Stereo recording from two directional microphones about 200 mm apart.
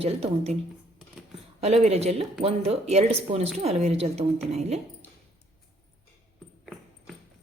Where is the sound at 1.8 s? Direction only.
30° right (ahead or behind).